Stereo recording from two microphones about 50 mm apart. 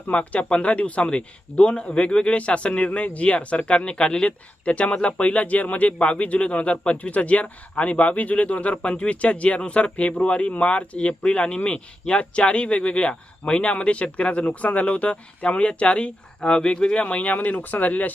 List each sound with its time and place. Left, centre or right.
0.1 s speech: left